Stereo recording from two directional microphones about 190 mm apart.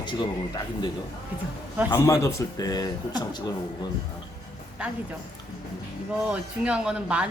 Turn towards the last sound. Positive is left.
turn(degrees=-5)  # may be behind; listen again after turning